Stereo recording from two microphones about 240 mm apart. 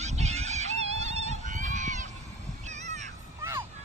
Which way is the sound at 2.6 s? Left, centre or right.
Right.